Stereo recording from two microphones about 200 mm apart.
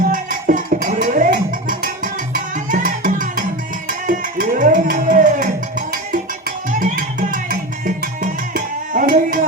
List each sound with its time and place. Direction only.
0.1 s music: 40° right (ahead or behind)
6.7 s music: 40° right (ahead or behind)